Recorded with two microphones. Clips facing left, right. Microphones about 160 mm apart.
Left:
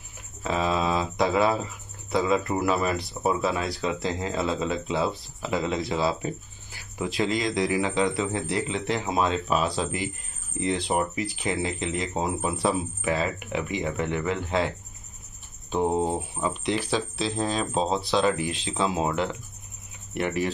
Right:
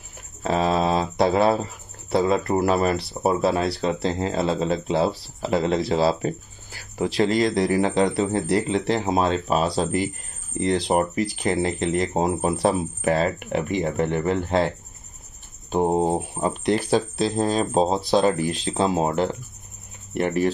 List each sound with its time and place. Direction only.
0.4 s speech: 40° right (ahead or behind)
15.7 s speech: 45° right (ahead or behind)